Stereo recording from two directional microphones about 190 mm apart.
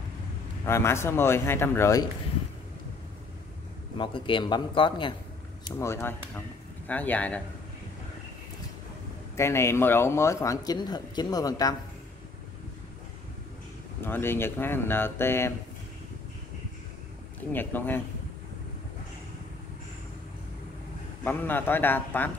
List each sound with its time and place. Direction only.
0.7 s speech: 15° left (ahead or behind)
4.0 s a man's voice: 25° left (ahead or behind)
5.8 s speech: 15° left (ahead or behind)
9.4 s speech: 15° left (ahead or behind)
14.0 s speech: 10° left (ahead or behind)
17.5 s speech: 10° left (ahead or behind)
21.2 s speech: 10° left (ahead or behind)